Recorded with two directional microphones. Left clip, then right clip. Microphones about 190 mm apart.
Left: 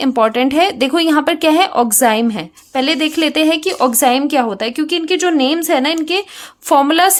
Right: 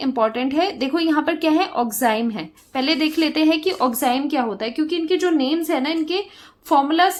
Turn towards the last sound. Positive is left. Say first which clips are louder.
# left 5 dB
turn(degrees=45)  # may be behind; listen again after turning